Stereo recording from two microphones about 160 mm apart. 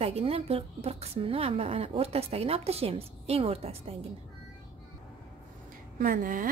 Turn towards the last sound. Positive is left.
turn(degrees=-60)  # may be behind; listen again after turning